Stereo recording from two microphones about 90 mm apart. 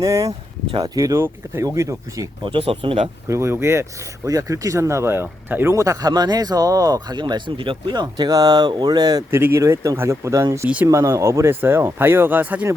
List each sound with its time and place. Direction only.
0.0 s speech: 40° right (ahead or behind)
2.4 s speech: 80° right
3.2 s speech: 30° right (ahead or behind)
5.7 s speech: 35° right (ahead or behind)
7.2 s speech: 55° right (ahead or behind)
9.3 s speech: 25° right (ahead or behind)